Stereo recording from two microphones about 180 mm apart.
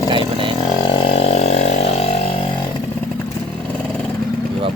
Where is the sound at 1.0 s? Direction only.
35° left (ahead or behind).